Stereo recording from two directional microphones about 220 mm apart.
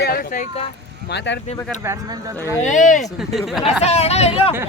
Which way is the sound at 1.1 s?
55° left (ahead or behind).